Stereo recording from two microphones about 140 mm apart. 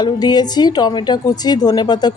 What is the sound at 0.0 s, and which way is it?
A woman's voice, 30° left (ahead or behind).